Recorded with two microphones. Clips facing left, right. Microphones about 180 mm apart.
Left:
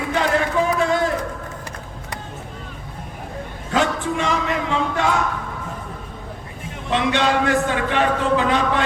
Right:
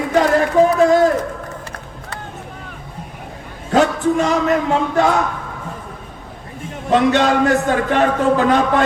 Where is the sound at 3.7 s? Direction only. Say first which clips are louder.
Right 6 dB; 40° right (ahead or behind).